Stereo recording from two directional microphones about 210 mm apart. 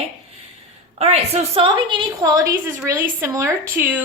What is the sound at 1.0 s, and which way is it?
Speech, 30° right (ahead or behind).